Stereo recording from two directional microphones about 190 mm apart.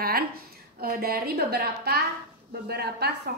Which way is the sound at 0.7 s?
55° right (ahead or behind).